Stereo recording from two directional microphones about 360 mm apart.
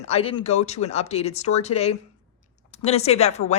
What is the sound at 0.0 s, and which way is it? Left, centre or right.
A woman's voice, centre.